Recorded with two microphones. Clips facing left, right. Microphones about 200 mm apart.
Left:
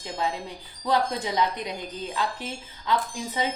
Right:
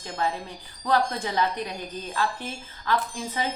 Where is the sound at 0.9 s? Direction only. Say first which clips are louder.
Even; 20° left (ahead or behind).